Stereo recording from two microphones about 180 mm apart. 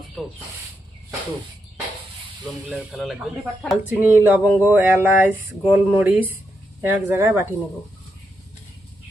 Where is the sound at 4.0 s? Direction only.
10° right (ahead or behind).